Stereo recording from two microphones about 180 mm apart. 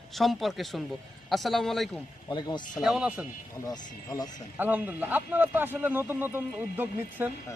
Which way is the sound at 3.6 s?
20° left (ahead or behind).